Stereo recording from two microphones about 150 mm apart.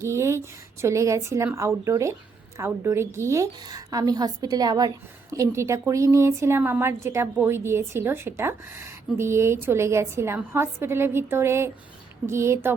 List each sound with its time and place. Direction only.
0.0 s a woman's voice: 20° right (ahead or behind)